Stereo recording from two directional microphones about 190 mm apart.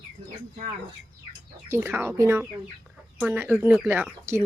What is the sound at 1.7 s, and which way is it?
Speech, 10° right (ahead or behind).